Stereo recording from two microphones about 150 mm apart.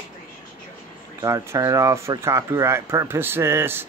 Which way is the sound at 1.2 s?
20° right (ahead or behind).